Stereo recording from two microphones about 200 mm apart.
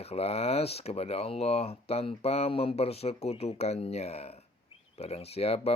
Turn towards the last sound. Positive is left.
turn(degrees=30)  # may be behind; listen again after turning